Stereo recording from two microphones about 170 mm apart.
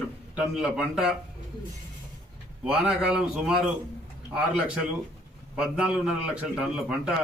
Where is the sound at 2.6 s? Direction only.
5° right (ahead or behind).